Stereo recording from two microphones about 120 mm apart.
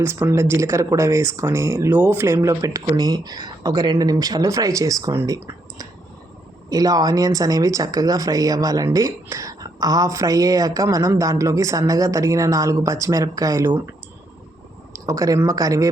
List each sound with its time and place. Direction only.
0.0 s speech: 20° right (ahead or behind)
15.0 s speech: 25° right (ahead or behind)